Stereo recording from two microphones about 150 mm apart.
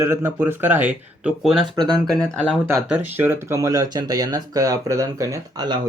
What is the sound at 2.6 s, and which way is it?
Speech, 15° right (ahead or behind).